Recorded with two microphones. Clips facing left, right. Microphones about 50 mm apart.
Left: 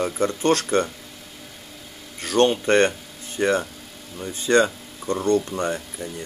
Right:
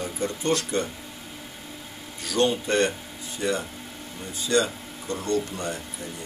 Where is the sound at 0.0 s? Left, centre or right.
Left.